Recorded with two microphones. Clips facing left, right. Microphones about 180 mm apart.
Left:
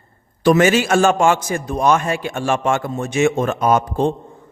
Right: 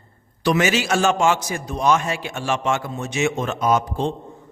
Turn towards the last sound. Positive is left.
turn(degrees=50)  # may be behind; listen again after turning